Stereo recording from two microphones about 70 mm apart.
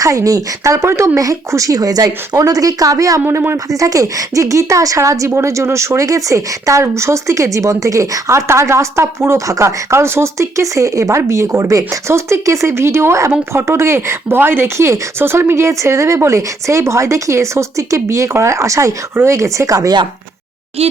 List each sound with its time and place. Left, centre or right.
0.0 s speech: right
3.2 s speech: right